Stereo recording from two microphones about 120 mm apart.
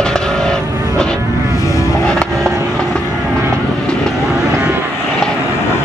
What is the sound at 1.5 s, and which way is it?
Vehicle, 25° left (ahead or behind).